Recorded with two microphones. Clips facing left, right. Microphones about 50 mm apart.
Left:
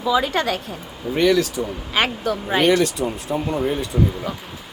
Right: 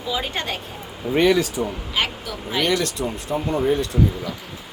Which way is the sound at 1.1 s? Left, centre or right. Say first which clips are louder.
Even; right.